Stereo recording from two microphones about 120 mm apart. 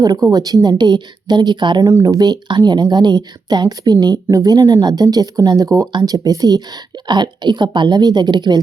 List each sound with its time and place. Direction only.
0.0 s speech: 30° right (ahead or behind)